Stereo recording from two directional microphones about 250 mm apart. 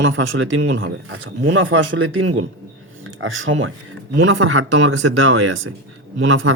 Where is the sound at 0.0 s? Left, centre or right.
Right.